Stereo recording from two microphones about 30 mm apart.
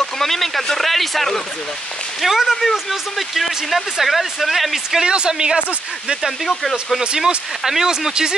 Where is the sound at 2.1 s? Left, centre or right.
Centre.